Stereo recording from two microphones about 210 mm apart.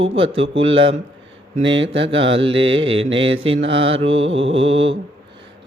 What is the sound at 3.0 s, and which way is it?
Speech, 65° right (ahead or behind).